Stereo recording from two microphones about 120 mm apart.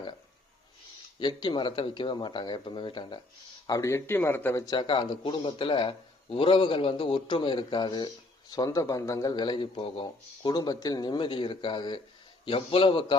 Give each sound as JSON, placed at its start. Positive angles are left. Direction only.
{"t": 1.2, "sound": "a man's voice", "side_deg": 40}
{"t": 3.7, "sound": "speech", "side_deg": 25}
{"t": 4.7, "sound": "a man's voice", "side_deg": 40}